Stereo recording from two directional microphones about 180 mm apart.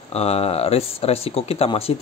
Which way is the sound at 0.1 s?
35° left (ahead or behind).